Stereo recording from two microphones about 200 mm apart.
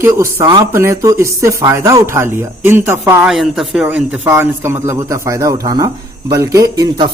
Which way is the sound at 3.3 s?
Centre (ahead or behind).